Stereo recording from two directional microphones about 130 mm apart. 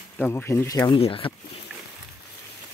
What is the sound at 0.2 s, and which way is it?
Speech, 15° left (ahead or behind).